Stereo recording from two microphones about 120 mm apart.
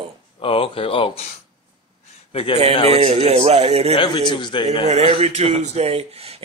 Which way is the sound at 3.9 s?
40° left (ahead or behind).